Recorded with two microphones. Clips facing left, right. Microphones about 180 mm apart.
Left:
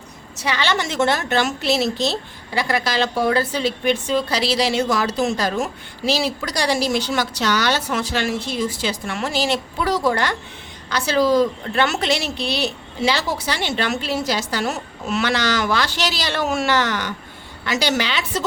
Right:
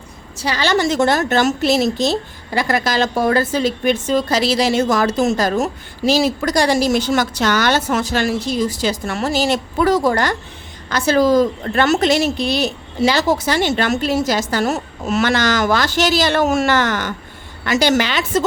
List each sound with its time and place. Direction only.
0.3 s a woman's voice: 35° right (ahead or behind)